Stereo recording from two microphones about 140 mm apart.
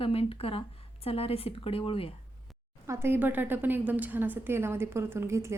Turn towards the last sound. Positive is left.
turn(degrees=-20)  # may be behind; listen again after turning